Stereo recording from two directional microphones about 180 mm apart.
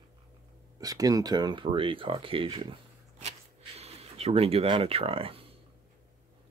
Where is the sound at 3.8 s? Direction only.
35° right (ahead or behind).